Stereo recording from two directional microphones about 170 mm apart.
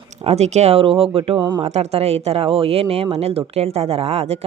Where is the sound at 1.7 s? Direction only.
40° right (ahead or behind).